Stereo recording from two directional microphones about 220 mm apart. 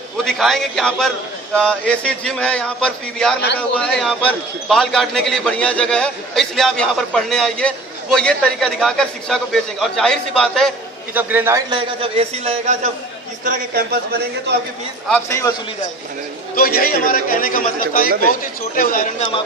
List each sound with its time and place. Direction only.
0.3 s a man's voice: centre (ahead or behind)
11.1 s a man's voice: 10° right (ahead or behind)
11.7 s a man's voice: 25° right (ahead or behind)
13.4 s a man's voice: 40° right (ahead or behind)
15.1 s a man's voice: 10° left (ahead or behind)
16.6 s a man's voice: 40° left (ahead or behind)
18.8 s a man's voice: 40° left (ahead or behind)